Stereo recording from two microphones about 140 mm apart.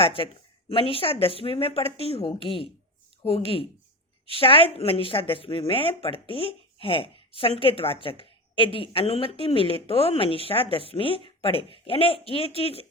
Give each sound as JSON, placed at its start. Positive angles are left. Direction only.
{"t": 0.0, "sound": "a woman's voice", "side_deg": 40}